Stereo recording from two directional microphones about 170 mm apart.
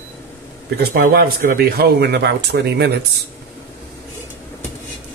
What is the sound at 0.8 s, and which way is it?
Speech, 65° right (ahead or behind).